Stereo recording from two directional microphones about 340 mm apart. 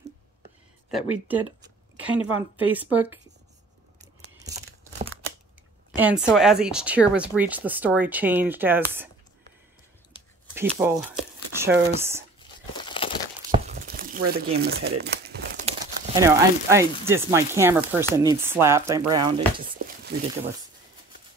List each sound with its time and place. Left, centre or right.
0.9 s speech: centre
4.4 s a sound: centre
5.9 s speech: centre
10.5 s speech: centre
12.7 s crumpling: centre
13.5 s a sound: right
14.3 s speech: right
16.2 s speech: centre